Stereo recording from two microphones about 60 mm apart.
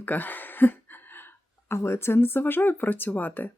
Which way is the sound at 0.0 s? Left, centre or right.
Left.